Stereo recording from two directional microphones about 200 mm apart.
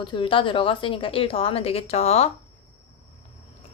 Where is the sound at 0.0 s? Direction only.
25° left (ahead or behind).